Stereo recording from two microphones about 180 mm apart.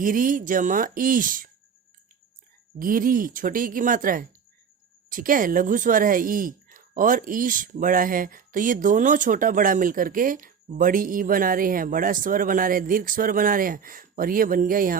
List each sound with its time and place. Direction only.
0.0 s speech: 50° right (ahead or behind)
2.7 s speech: 50° right (ahead or behind)